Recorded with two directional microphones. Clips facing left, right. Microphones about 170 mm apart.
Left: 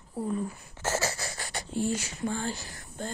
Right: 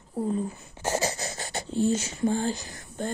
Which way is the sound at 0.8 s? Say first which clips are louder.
Right 3 dB; 20° right (ahead or behind).